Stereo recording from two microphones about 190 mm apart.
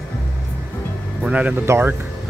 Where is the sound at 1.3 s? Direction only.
5° right (ahead or behind).